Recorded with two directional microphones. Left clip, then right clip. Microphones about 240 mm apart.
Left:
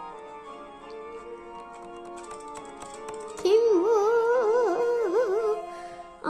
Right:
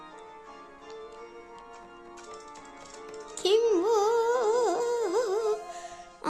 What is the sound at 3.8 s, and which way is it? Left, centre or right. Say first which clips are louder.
Music: left 2 dB; right.